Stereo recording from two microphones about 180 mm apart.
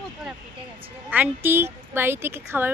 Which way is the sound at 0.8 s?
10° right (ahead or behind).